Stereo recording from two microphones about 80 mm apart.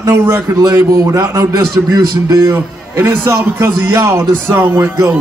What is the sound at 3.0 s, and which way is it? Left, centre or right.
Speech, right.